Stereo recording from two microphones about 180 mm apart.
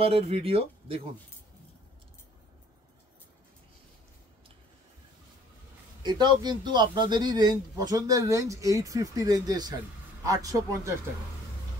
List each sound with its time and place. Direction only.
0.0 s speech: 30° right (ahead or behind)
6.0 s a man's voice: 25° right (ahead or behind)